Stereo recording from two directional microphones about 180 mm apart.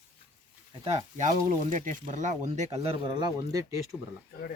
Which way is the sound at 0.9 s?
40° right (ahead or behind).